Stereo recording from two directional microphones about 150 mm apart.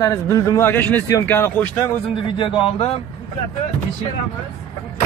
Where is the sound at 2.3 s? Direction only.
35° left (ahead or behind).